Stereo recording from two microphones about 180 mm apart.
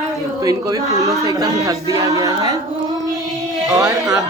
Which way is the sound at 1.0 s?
20° right (ahead or behind).